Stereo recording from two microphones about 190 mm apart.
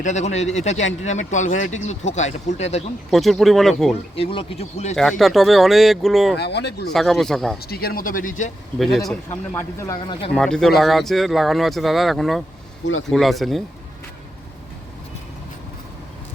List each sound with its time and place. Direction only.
0.0 s speech: 40° left (ahead or behind)
3.1 s speech: centre (ahead or behind)
4.1 s speech: 30° left (ahead or behind)
4.9 s speech: centre (ahead or behind)
6.3 s speech: 60° left (ahead or behind)
6.8 s speech: centre (ahead or behind)
7.6 s speech: 55° left (ahead or behind)
9.3 s speech: 15° left (ahead or behind)
10.3 s speech: 5° left (ahead or behind)